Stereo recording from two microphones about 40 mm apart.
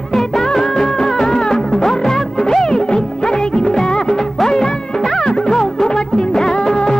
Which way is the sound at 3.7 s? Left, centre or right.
Centre.